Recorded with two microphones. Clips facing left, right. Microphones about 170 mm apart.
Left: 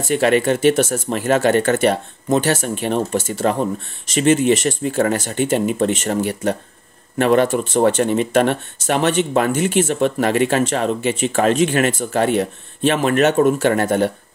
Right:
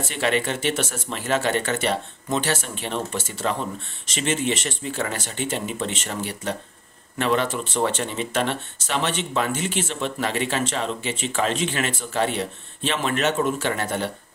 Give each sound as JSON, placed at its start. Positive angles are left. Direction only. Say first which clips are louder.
{"t": 0.1, "sound": "speech", "louder": "left 9 dB", "side_deg": 45}